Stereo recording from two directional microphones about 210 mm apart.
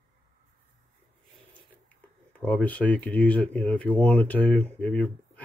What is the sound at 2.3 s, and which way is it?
Speech, 5° left (ahead or behind).